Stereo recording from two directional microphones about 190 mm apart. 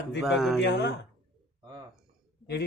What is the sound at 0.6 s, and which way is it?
Speech, 65° left (ahead or behind).